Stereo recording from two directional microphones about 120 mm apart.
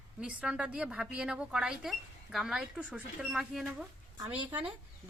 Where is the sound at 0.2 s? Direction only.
10° right (ahead or behind).